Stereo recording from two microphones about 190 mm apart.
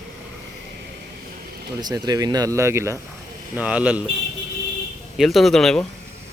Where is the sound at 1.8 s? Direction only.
20° right (ahead or behind).